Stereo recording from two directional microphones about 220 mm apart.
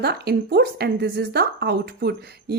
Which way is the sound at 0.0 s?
45° right (ahead or behind).